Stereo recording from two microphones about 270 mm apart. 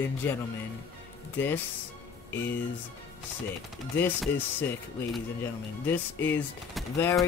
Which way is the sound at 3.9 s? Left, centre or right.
Centre.